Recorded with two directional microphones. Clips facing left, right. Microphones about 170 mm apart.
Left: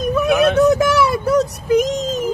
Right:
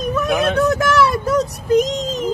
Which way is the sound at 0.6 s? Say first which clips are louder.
Left 2 dB; 15° left (ahead or behind).